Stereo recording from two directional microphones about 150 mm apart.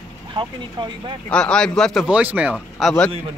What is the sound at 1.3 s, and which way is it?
Speech, 5° left (ahead or behind).